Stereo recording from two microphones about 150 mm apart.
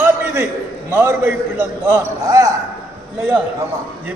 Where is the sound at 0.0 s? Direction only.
15° right (ahead or behind).